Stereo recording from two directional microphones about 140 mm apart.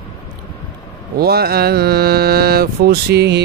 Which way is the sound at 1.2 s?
90° right.